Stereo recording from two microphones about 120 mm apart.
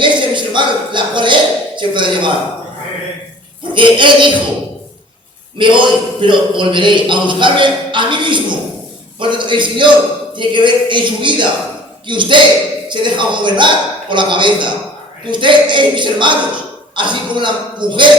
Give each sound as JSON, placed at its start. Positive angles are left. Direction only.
{"t": 0.0, "sound": "speech", "side_deg": -40}
{"t": 3.8, "sound": "a man's voice", "side_deg": -40}
{"t": 5.5, "sound": "a man's voice", "side_deg": -40}